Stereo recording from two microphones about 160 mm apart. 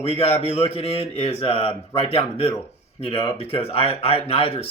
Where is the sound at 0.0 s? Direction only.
40° left (ahead or behind).